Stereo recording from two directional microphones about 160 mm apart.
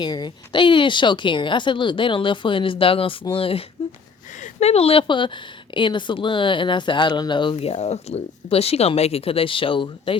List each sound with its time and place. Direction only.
0.0 s speech: 25° left (ahead or behind)